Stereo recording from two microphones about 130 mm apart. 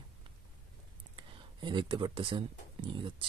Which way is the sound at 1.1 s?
35° right (ahead or behind).